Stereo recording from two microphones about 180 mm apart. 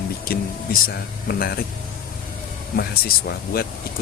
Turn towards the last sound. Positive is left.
turn(degrees=55)  # may be behind; listen again after turning